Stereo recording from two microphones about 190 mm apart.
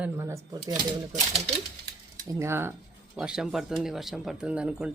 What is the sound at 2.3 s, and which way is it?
Speech, 15° right (ahead or behind).